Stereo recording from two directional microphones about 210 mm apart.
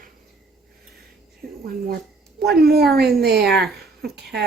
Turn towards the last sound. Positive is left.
turn(degrees=-50)  # may be behind; listen again after turning